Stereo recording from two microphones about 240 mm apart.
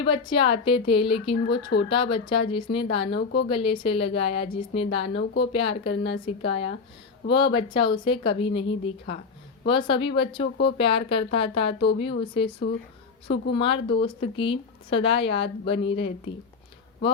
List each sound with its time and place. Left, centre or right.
0.0 s speech: centre